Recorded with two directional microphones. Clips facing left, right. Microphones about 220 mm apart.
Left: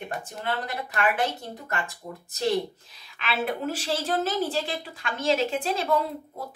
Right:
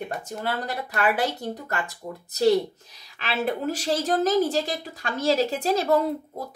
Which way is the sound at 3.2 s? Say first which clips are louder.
Right 2 dB; 40° right (ahead or behind).